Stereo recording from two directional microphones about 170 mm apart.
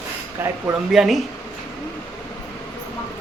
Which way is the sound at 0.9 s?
Centre (ahead or behind).